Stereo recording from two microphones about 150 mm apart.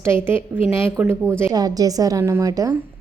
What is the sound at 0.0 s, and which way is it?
A woman's voice, 15° right (ahead or behind).